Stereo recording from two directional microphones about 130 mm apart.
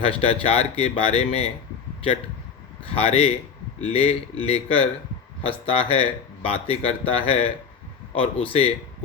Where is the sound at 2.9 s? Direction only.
50° left (ahead or behind).